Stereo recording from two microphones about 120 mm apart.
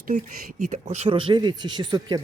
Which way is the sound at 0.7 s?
75° right (ahead or behind).